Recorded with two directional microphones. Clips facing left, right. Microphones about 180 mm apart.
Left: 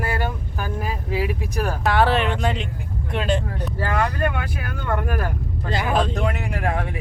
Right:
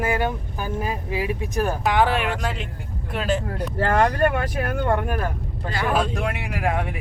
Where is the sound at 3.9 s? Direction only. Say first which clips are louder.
Right 4 dB; 35° right (ahead or behind).